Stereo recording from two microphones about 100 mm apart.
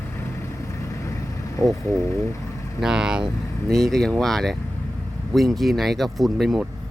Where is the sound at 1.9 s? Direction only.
30° left (ahead or behind).